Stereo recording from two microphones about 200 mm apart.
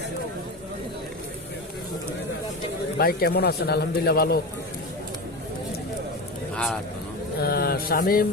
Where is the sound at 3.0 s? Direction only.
50° left (ahead or behind).